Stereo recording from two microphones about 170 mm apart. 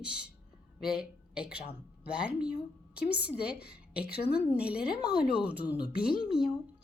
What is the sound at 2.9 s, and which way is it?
A woman's voice, 70° left (ahead or behind).